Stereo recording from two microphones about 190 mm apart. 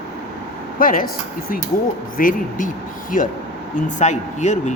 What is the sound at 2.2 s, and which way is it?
Speech, 45° left (ahead or behind).